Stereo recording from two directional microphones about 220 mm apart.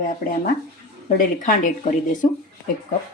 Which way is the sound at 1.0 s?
35° left (ahead or behind).